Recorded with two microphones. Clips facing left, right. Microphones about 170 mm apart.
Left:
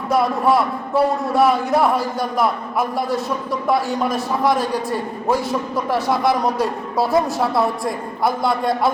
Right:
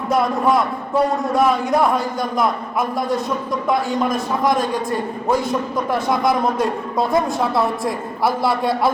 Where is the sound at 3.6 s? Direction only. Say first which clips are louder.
Even; 5° left (ahead or behind).